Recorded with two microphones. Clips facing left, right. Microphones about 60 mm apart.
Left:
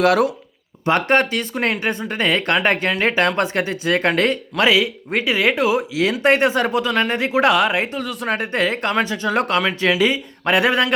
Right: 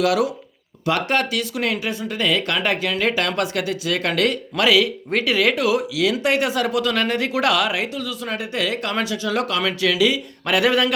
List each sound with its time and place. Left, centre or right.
0.0 s speech: left
10.4 s speech: left